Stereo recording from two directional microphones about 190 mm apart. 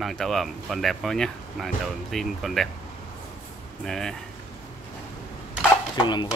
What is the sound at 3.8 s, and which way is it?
Speech, centre (ahead or behind).